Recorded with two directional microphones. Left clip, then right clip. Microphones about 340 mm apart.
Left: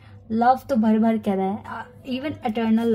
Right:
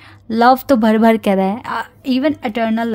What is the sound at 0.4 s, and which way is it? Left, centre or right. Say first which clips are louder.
A woman's voice: right 8 dB; right.